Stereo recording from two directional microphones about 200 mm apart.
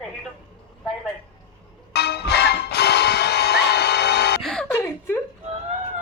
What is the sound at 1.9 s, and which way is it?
Music, 55° left (ahead or behind).